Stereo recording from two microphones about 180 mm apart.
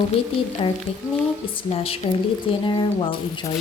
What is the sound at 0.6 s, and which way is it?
Speech, 30° left (ahead or behind).